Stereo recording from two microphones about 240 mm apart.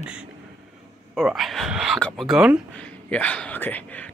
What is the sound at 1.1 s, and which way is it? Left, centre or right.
Speech, centre.